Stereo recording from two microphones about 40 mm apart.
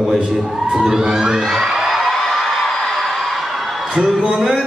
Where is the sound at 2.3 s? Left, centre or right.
Centre.